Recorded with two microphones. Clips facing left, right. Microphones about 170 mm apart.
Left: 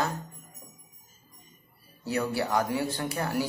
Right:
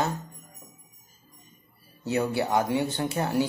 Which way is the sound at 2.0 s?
25° right (ahead or behind).